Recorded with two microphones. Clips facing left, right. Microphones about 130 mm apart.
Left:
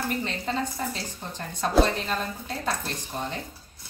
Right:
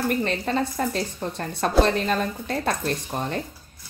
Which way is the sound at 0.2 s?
65° right (ahead or behind).